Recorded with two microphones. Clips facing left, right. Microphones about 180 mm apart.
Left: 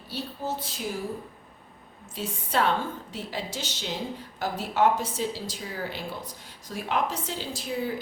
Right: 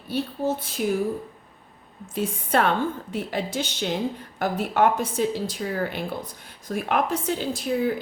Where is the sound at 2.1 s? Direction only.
55° right (ahead or behind).